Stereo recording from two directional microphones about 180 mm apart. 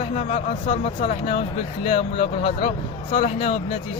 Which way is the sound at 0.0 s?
35° left (ahead or behind).